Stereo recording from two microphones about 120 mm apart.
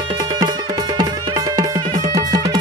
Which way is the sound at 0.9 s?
30° right (ahead or behind).